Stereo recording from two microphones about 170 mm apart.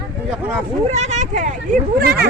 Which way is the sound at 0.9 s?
40° right (ahead or behind).